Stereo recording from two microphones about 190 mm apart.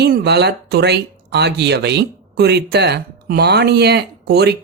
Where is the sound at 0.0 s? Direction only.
60° right (ahead or behind).